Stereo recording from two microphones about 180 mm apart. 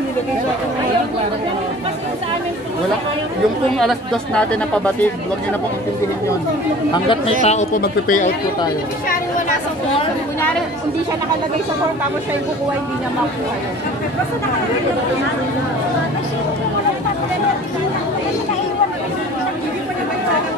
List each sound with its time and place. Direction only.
3.8 s speech: 5° left (ahead or behind)
6.9 s speech: 30° left (ahead or behind); by 8.3 s 45° left (ahead or behind)